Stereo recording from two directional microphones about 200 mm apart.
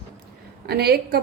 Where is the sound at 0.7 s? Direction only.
50° right (ahead or behind).